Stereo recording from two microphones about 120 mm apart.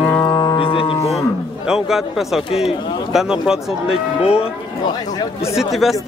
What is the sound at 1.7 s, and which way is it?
A man's voice, 5° right (ahead or behind).